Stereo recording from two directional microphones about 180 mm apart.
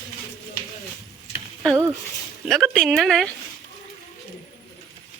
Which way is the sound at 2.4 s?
Centre (ahead or behind).